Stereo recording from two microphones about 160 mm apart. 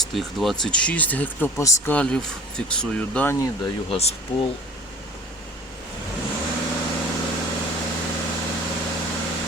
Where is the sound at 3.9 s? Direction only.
40° left (ahead or behind).